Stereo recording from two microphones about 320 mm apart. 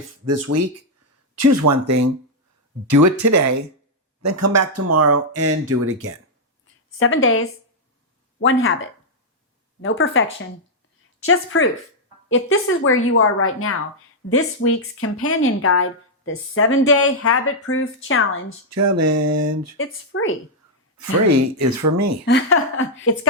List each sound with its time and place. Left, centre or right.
0.3 s speech: right
7.0 s speech: left
11.3 s speech: left
18.7 s speech: right
19.8 s speech: left
21.0 s speech: right
22.3 s speech: left